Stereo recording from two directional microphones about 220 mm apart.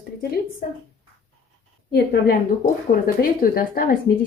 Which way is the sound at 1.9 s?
45° left (ahead or behind).